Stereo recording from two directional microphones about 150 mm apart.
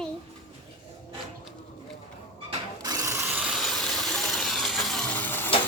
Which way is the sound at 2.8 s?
20° right (ahead or behind).